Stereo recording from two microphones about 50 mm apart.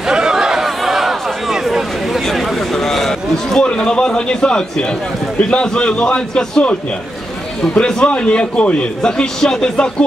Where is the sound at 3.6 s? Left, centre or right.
Centre.